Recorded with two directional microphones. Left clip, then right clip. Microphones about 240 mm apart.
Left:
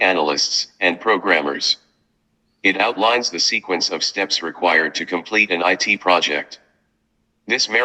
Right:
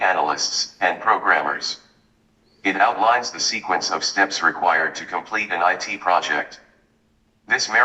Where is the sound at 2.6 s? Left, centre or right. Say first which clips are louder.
Left 1 dB; left.